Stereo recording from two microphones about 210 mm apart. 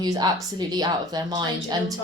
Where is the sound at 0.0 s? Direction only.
20° right (ahead or behind).